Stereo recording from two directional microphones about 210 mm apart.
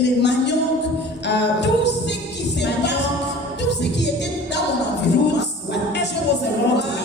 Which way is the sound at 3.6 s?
55° left (ahead or behind).